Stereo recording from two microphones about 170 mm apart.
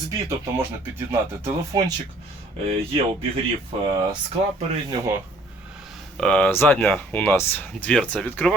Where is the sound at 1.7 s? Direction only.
20° right (ahead or behind).